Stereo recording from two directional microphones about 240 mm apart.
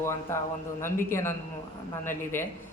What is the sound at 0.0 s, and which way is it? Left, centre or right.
Speech, centre.